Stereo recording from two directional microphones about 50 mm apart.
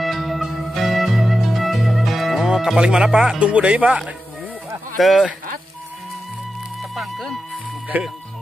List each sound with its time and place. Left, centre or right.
0.0 s music: centre; by 4.0 s right
4.9 s speech: centre
7.9 s speech: right